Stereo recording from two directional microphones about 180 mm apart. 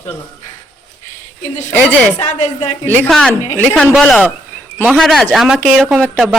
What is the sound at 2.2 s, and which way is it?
Speech, 40° left (ahead or behind).